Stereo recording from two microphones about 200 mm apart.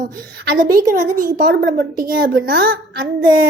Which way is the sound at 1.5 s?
55° right (ahead or behind).